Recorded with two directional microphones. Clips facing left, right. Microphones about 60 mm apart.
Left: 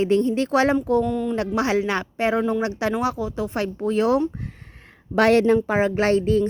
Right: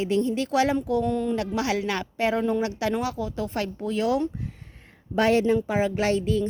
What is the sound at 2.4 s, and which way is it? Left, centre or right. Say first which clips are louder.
Speech: left 2 dB; centre.